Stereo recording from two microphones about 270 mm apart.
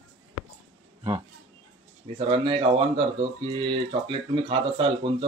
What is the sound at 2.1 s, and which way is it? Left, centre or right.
Speech, centre.